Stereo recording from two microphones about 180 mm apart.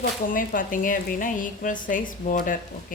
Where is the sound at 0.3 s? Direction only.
50° left (ahead or behind).